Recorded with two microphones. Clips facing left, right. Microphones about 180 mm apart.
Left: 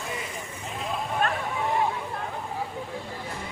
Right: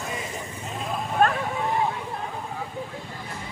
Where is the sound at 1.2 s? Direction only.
45° right (ahead or behind).